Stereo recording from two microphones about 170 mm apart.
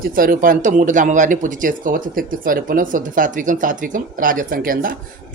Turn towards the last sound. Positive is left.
turn(degrees=-55)  # may be behind; listen again after turning